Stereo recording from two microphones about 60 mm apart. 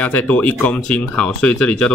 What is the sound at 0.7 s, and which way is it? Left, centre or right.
Speech, centre.